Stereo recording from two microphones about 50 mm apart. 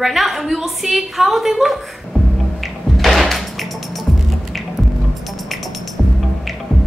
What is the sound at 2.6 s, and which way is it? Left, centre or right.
Music, centre.